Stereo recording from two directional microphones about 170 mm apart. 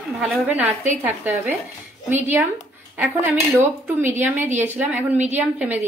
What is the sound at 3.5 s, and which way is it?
A woman's voice, 10° right (ahead or behind).